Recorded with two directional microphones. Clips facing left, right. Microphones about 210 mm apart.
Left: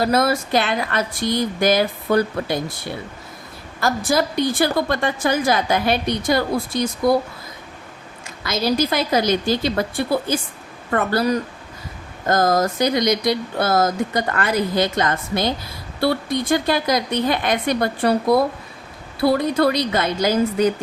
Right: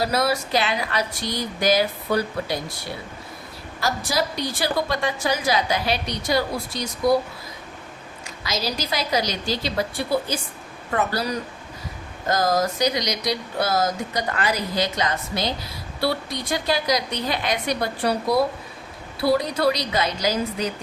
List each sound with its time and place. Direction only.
0.0 s a woman's voice: 50° left (ahead or behind)
3.8 s a woman's voice: 50° left (ahead or behind)
8.4 s a woman's voice: 55° left (ahead or behind)